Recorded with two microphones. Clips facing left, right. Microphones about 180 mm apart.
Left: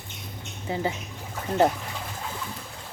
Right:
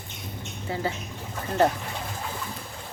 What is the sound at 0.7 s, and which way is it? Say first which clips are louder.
Speech: left 2 dB; 20° left (ahead or behind).